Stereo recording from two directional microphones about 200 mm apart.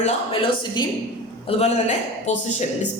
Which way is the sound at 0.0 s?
25° left (ahead or behind).